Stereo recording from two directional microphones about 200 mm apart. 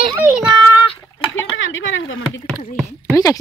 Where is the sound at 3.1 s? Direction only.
15° left (ahead or behind).